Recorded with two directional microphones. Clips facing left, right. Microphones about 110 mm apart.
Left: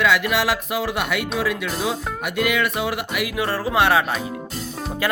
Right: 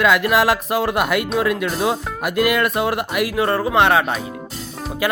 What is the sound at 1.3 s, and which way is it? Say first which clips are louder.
Speech: right 4 dB; 55° right (ahead or behind).